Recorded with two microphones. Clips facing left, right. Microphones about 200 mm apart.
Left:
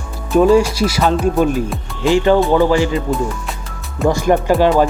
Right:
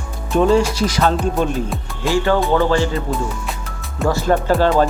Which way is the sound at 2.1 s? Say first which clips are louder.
Left 4 dB; 20° left (ahead or behind).